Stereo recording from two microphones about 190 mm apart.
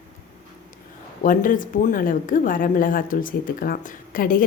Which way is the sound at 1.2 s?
45° left (ahead or behind).